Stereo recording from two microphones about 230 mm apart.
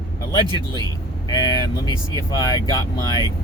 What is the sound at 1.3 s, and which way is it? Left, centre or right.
Speech, centre.